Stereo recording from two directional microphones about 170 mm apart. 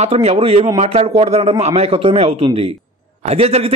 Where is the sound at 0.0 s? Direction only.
40° right (ahead or behind).